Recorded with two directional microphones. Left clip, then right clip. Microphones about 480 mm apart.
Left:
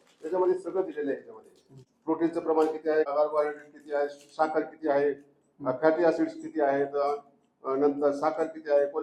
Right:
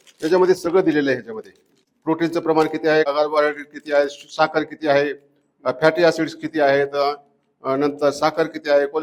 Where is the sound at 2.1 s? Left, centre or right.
Right.